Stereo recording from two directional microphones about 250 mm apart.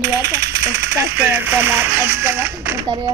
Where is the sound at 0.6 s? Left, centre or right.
Right.